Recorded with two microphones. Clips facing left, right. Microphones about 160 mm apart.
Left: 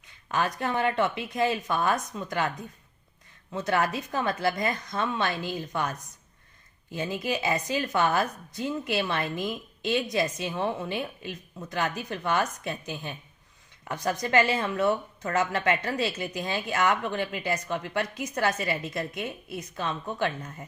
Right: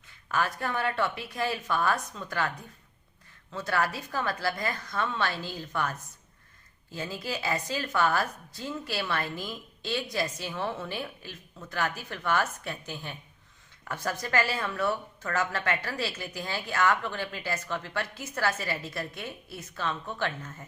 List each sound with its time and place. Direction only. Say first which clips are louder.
0.1 s a woman's voice: left 2 dB; 20° left (ahead or behind)